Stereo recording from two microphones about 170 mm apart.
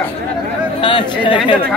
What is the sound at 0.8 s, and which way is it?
Speech, 30° left (ahead or behind).